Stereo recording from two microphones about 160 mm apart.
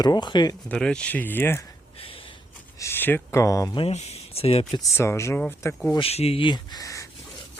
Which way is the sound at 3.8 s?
40° left (ahead or behind).